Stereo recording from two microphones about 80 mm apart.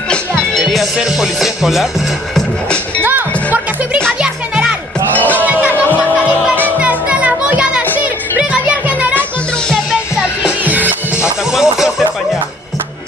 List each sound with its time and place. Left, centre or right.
0.4 s music: centre
3.0 s music: right
4.2 s music: centre
5.1 s music: left
5.4 s music: centre
6.8 s music: centre
10.4 s music: right
11.5 s a sound: centre